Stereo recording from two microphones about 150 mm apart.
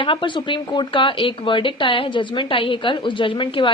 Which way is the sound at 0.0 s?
35° left (ahead or behind).